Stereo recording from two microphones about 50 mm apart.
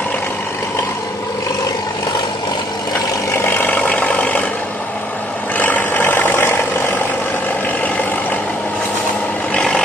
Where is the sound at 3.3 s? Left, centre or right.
Left.